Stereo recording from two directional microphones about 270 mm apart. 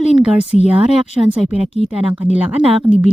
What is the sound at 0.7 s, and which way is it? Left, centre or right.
Speech, centre.